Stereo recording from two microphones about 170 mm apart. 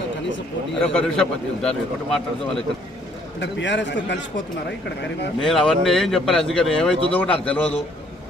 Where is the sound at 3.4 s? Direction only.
90° left.